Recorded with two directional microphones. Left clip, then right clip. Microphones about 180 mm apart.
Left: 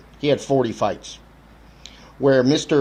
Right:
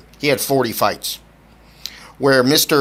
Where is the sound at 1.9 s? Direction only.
45° right (ahead or behind).